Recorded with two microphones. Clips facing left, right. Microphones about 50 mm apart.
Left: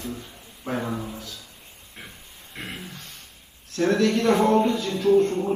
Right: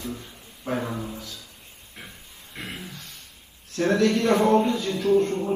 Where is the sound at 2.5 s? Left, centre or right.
Left.